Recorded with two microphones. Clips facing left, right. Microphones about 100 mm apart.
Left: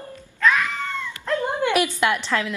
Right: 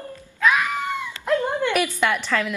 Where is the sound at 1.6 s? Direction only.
10° left (ahead or behind).